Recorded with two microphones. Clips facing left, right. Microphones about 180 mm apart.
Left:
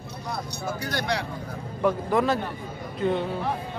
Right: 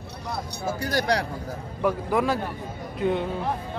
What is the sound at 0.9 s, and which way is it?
Speech, 40° right (ahead or behind).